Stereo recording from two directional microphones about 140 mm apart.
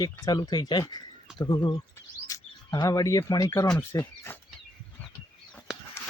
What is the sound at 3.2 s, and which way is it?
Speech, 30° left (ahead or behind).